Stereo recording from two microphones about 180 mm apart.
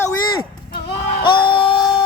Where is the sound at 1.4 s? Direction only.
25° left (ahead or behind).